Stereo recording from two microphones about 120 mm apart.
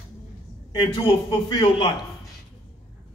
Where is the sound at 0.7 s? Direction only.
50° left (ahead or behind).